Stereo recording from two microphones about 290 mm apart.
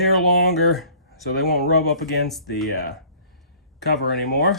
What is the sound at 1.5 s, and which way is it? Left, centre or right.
Speech, left.